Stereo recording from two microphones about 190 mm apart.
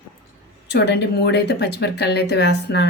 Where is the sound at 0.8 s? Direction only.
60° left (ahead or behind).